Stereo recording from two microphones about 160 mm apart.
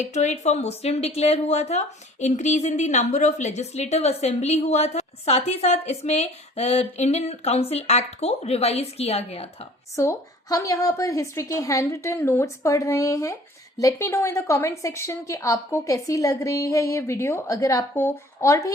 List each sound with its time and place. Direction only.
0.0 s a woman's voice: 45° left (ahead or behind)
9.9 s a woman's voice: 20° left (ahead or behind)